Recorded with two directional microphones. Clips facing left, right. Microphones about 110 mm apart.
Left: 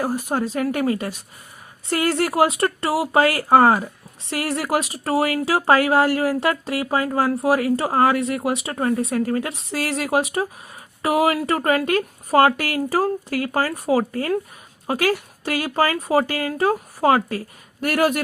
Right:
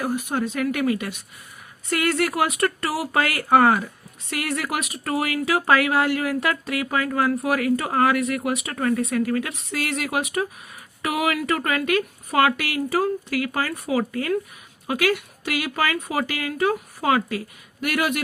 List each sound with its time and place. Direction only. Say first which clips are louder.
0.0 s speech: left 2 dB; 35° left (ahead or behind)